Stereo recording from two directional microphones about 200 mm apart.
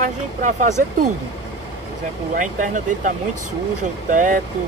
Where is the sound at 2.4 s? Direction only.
40° right (ahead or behind).